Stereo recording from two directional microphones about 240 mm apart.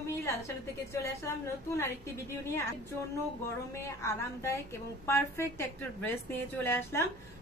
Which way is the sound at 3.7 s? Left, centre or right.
Centre.